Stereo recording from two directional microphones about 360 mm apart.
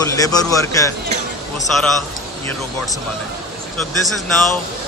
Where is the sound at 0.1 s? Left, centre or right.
Centre.